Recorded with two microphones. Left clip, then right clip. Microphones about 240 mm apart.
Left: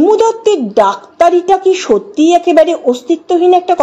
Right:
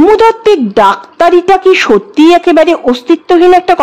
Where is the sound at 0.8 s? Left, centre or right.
Right.